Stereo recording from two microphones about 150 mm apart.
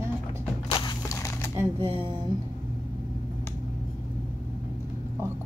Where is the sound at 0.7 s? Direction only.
30° left (ahead or behind).